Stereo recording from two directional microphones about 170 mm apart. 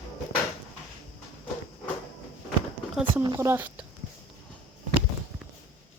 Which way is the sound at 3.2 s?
20° right (ahead or behind).